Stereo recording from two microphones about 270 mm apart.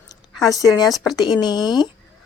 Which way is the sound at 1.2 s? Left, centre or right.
Centre.